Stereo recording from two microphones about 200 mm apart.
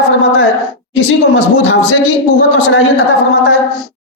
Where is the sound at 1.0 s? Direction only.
65° left (ahead or behind).